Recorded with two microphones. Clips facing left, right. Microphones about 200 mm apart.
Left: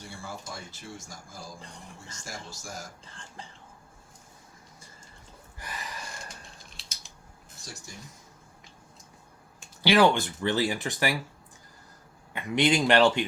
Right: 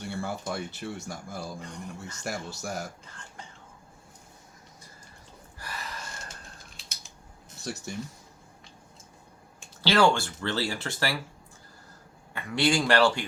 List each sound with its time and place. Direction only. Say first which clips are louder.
0.2 s speech: right 8 dB; 65° right (ahead or behind)
5.5 s burping: even; 15° left (ahead or behind)
7.6 s speech: right 10 dB; 65° right (ahead or behind)
9.8 s speech: left 1 dB; 15° left (ahead or behind)
12.3 s speech: left 1 dB; 20° left (ahead or behind)